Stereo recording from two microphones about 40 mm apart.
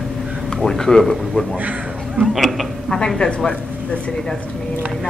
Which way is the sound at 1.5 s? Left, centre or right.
Right.